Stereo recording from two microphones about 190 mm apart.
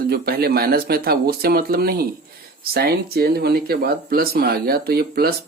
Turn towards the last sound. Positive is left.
turn(degrees=-55)  # may be behind; listen again after turning